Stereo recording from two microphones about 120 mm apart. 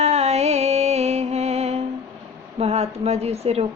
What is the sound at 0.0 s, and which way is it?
Music, 65° right (ahead or behind).